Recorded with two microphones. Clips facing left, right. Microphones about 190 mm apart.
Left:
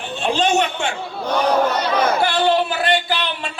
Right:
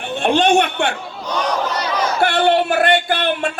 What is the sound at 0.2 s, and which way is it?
Speech, 60° right (ahead or behind).